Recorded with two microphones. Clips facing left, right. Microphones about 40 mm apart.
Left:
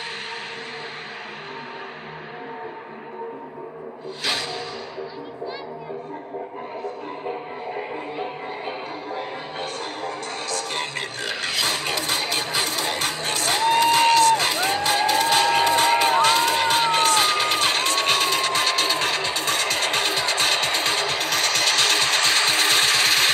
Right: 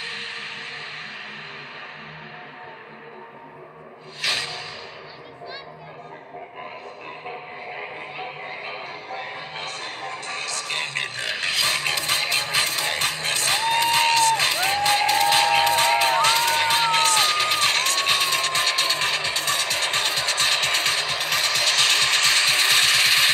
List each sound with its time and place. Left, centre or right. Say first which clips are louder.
4.2 s music: right 1 dB; centre
10.0 s music: right 1 dB; centre
15.7 s crowd: left 1 dB; centre
16.6 s music: left 1 dB; centre
18.4 s a sound: left 1 dB; centre
19.7 s music: left 1 dB; centre
20.5 s sewing machine: even; centre